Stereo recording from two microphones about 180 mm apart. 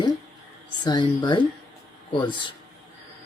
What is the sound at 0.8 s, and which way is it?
Speech, 25° left (ahead or behind).